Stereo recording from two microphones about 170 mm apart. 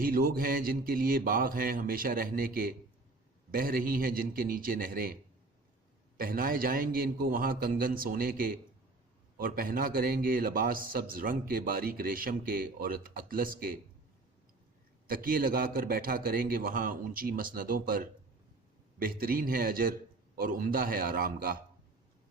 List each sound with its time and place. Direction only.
0.0 s a man's voice: 60° right (ahead or behind)
6.1 s a man's voice: 60° right (ahead or behind)
15.0 s a man's voice: 55° right (ahead or behind)